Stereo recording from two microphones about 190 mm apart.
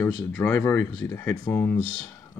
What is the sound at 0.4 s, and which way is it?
Speech, 10° left (ahead or behind).